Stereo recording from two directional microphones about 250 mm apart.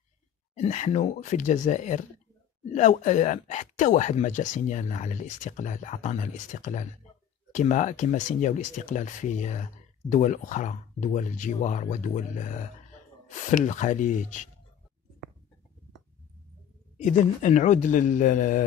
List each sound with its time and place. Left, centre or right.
0.6 s speech: left
16.9 s a man's voice: left